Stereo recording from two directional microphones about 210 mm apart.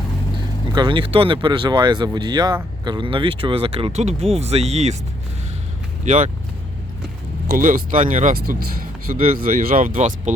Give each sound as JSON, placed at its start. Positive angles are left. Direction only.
{"t": 0.7, "sound": "speech", "side_deg": -20}
{"t": 6.1, "sound": "speech", "side_deg": -35}
{"t": 7.4, "sound": "speech", "side_deg": -40}